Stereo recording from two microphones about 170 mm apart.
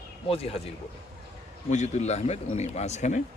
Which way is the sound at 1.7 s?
40° left (ahead or behind).